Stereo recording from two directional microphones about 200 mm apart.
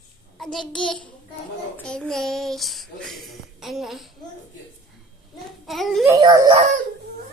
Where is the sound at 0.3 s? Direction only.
Centre (ahead or behind).